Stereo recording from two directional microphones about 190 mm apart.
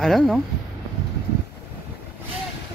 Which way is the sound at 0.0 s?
Centre (ahead or behind).